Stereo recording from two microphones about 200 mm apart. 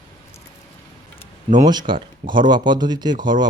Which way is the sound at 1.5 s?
20° right (ahead or behind).